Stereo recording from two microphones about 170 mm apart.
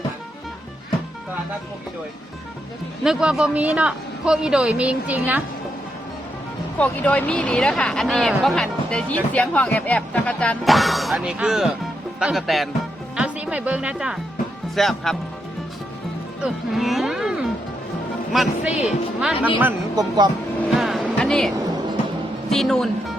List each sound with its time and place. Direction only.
3.0 s speech: 5° right (ahead or behind)
6.7 s speech: 10° left (ahead or behind)
16.4 s speech: centre (ahead or behind)
20.0 s speech: 25° right (ahead or behind)
20.7 s music: centre (ahead or behind)
22.4 s speech: centre (ahead or behind)